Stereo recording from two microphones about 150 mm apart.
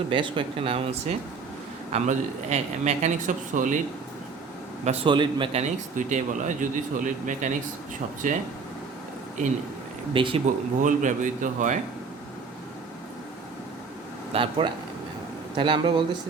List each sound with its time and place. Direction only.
0.1 s a man's voice: 35° right (ahead or behind); by 3.8 s 60° right (ahead or behind)
5.0 s speech: 30° right (ahead or behind)
5.5 s speech: 55° right (ahead or behind)
10.1 s speech: 35° right (ahead or behind)
10.4 s speech: 55° right (ahead or behind)
14.3 s speech: 35° right (ahead or behind)